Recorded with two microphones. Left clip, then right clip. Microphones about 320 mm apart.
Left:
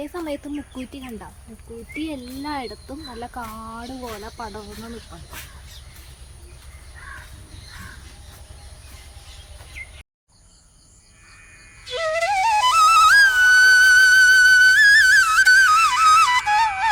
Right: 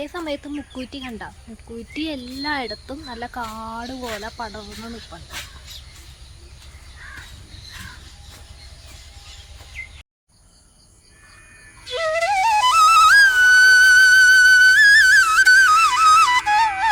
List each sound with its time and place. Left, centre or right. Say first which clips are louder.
0.0 s speech: right 1 dB; centre
11.9 s flute: right 1 dB; centre